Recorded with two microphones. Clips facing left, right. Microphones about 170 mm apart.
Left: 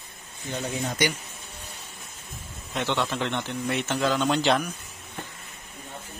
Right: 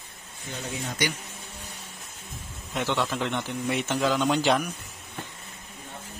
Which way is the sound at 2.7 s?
5° right (ahead or behind).